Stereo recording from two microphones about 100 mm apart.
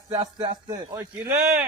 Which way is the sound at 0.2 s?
40° right (ahead or behind).